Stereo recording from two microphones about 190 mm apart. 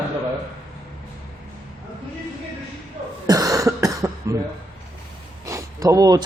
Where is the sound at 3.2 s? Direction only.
20° right (ahead or behind).